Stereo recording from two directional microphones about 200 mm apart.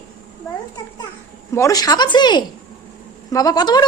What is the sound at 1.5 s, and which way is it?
Speech, 15° left (ahead or behind).